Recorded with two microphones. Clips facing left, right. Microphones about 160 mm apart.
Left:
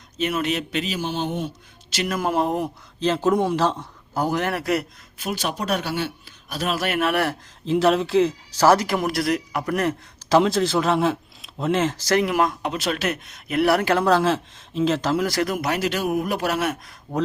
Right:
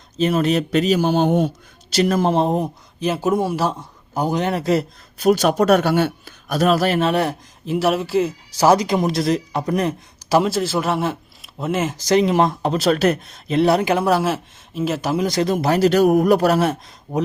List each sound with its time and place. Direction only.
0.2 s speech: 35° right (ahead or behind)
3.0 s a man's voice: 10° right (ahead or behind)
5.1 s a man's voice: 40° right (ahead or behind); by 7.3 s 20° right (ahead or behind)
7.6 s a man's voice: 5° right (ahead or behind)
8.6 s speech: 15° right (ahead or behind); by 16.9 s 30° right (ahead or behind)